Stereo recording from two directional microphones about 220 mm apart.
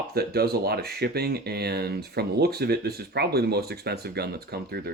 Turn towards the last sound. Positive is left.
turn(degrees=-45)  # may be behind; listen again after turning